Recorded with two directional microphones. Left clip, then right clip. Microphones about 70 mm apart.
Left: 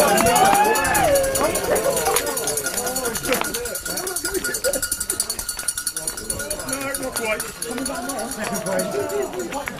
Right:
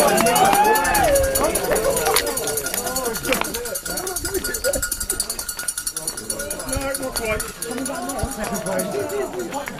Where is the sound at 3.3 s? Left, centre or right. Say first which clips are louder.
Even; centre.